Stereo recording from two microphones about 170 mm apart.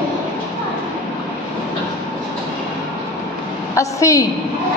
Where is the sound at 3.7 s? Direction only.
20° left (ahead or behind).